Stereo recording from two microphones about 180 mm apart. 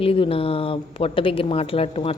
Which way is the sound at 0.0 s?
30° left (ahead or behind).